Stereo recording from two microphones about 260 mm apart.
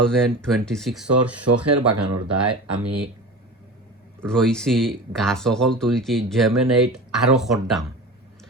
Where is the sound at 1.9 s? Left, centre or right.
Right.